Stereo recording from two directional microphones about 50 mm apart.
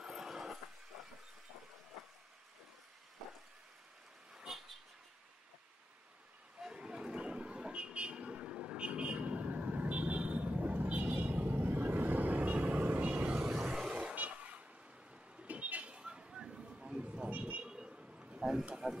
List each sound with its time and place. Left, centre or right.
0.0 s vehicle: centre
0.9 s train: centre
4.4 s vehicle: centre
6.6 s vehicle: centre
13.6 s vehicle: centre
14.1 s vehicle: right
15.4 s a sound: right
17.6 s vehicle: centre
18.4 s a sound: centre